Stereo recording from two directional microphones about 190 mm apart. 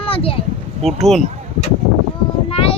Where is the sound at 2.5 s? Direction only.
30° left (ahead or behind).